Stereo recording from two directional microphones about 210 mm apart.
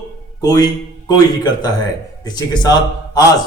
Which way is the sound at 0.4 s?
20° left (ahead or behind).